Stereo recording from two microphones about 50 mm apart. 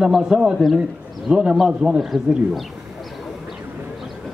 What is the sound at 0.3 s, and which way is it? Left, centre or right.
A man's voice, centre.